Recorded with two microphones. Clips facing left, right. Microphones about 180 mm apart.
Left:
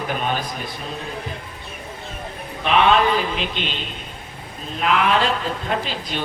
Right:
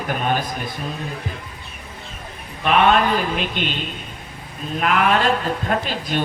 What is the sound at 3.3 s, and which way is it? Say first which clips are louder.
Speech: right 2 dB; 50° right (ahead or behind).